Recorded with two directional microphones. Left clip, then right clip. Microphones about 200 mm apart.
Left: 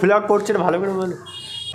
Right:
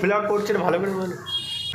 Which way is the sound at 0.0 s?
30° left (ahead or behind).